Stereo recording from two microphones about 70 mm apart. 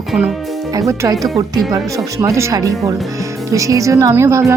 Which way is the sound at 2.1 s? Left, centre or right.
Right.